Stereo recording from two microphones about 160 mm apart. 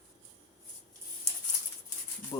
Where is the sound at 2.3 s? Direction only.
20° left (ahead or behind).